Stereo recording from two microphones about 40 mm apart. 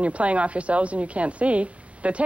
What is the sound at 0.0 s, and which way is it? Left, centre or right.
A woman's voice, right.